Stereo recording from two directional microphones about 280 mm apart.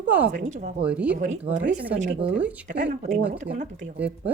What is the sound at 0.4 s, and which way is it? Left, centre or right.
Speech, right.